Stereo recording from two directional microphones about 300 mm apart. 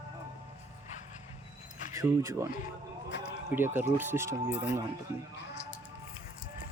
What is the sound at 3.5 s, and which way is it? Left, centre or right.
Speech, centre.